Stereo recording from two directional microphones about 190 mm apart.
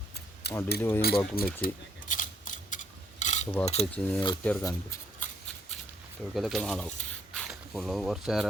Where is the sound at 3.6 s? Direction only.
35° left (ahead or behind).